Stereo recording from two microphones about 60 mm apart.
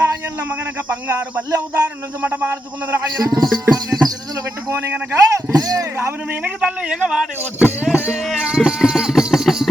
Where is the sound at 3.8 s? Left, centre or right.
Right.